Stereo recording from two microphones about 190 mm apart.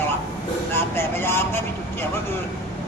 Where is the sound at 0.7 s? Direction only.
10° left (ahead or behind).